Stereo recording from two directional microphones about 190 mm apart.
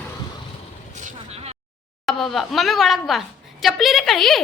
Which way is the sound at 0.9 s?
35° right (ahead or behind).